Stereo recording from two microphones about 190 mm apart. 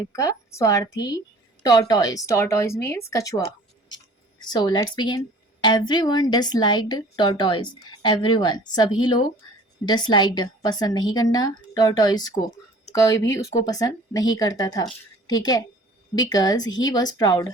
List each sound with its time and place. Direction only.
0.0 s a woman's voice: 20° left (ahead or behind)